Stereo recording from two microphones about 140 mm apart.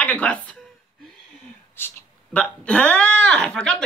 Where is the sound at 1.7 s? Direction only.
10° left (ahead or behind).